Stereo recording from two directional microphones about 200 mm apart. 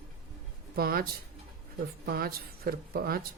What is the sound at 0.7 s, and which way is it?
Speech, 50° right (ahead or behind).